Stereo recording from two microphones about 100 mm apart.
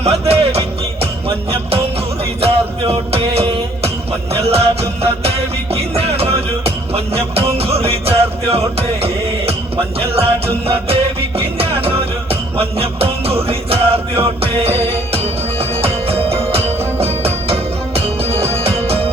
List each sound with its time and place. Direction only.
0.0 s music: 90° right
2.4 s music: 85° right